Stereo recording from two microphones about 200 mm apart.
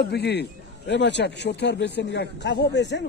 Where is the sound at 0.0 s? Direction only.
55° left (ahead or behind).